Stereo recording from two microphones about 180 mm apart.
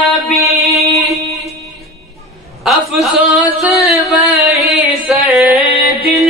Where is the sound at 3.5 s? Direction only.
5° right (ahead or behind).